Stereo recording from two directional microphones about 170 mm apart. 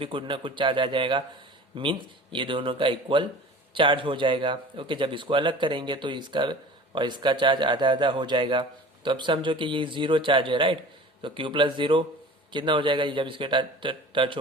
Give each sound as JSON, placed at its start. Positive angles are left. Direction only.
{"t": 0.0, "sound": "a man's voice", "side_deg": -30}